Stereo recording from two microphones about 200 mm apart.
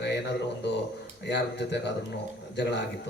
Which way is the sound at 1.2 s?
60° left (ahead or behind).